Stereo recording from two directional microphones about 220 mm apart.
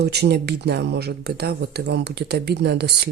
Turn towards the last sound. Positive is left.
turn(degrees=-50)  # may be behind; listen again after turning